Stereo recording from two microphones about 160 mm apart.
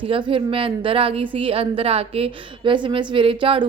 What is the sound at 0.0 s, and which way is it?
A woman's voice, 35° right (ahead or behind).